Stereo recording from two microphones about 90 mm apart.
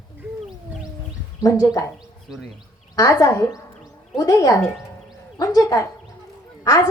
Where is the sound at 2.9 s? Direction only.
40° left (ahead or behind).